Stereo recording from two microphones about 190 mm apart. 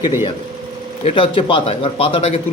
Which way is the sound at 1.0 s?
30° left (ahead or behind).